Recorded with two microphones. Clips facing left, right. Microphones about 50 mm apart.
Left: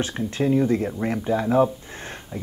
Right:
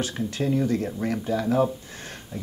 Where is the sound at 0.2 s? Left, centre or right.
Centre.